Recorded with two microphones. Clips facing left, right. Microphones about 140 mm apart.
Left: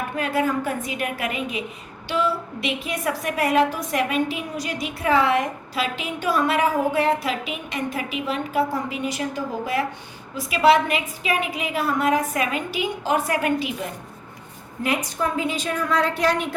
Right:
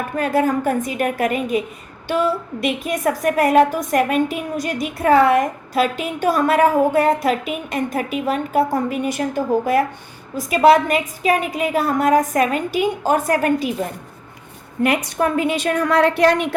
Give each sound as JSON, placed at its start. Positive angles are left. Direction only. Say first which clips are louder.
{"t": 0.2, "sound": "a woman's voice", "louder": "right 5 dB", "side_deg": -45}
{"t": 14.8, "sound": "a woman's voice", "louder": "right 5 dB", "side_deg": -65}